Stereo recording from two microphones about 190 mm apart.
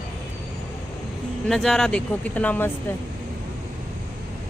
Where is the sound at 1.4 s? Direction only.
Centre (ahead or behind).